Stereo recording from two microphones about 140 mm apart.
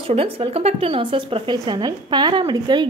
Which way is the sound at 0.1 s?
45° right (ahead or behind).